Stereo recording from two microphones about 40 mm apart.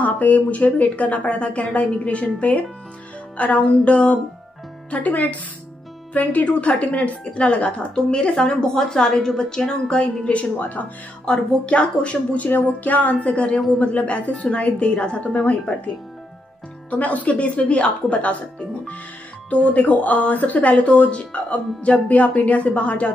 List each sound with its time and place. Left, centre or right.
0.0 s speech: left
6.4 s speech: left
7.9 s a woman's voice: centre
12.4 s speech: left
16.9 s speech: left
19.5 s speech: left